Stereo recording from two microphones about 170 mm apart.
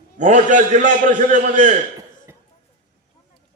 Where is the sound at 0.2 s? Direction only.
45° right (ahead or behind).